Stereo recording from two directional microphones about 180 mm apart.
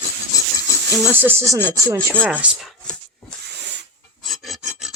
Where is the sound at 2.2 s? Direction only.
10° right (ahead or behind).